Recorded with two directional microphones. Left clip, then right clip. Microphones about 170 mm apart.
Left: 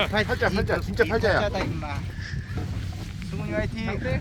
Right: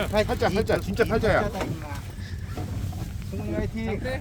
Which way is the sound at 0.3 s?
75° right (ahead or behind).